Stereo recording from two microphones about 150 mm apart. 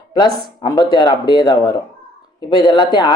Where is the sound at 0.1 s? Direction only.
30° left (ahead or behind).